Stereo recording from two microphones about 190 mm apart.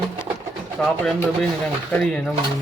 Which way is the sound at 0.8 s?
5° left (ahead or behind).